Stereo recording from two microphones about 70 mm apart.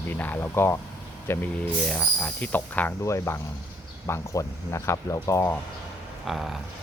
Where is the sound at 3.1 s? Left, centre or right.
Left.